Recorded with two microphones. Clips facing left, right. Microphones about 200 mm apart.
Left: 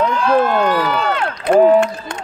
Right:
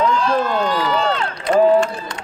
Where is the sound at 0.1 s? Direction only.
60° left (ahead or behind).